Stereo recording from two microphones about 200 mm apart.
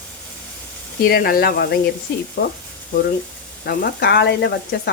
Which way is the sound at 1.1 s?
50° left (ahead or behind).